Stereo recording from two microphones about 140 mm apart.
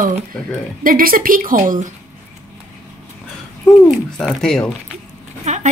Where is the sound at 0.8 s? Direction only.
90° right; by 1.9 s 70° right (ahead or behind).